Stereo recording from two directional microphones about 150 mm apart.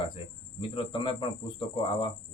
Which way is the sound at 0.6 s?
35° left (ahead or behind).